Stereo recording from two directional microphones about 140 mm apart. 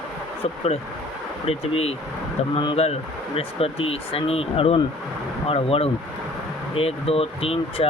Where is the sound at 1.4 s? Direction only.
45° left (ahead or behind).